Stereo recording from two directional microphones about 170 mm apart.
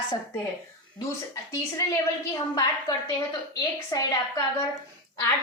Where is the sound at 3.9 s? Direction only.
20° left (ahead or behind).